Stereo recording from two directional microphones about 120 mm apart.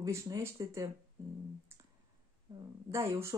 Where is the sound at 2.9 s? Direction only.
25° right (ahead or behind).